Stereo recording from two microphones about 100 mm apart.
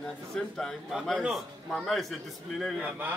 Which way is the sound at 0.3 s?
10° left (ahead or behind).